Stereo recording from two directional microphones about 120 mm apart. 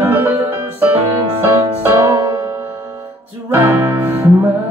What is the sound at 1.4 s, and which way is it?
Music, 20° right (ahead or behind).